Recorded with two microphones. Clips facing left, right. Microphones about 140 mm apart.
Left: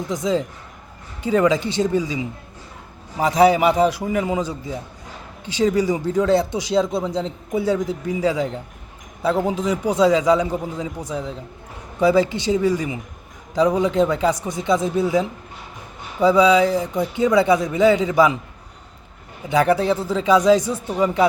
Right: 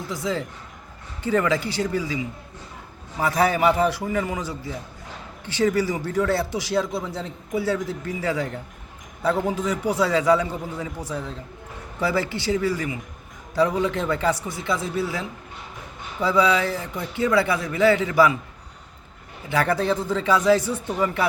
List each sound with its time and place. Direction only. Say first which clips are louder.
0.1 s speech: left 5 dB; 20° left (ahead or behind)
19.5 s speech: left 5 dB; 15° left (ahead or behind)